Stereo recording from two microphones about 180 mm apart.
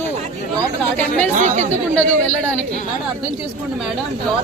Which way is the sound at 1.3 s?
40° right (ahead or behind).